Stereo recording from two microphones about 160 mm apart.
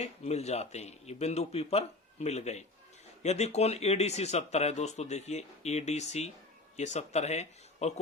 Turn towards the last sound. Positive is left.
turn(degrees=45)  # may be behind; listen again after turning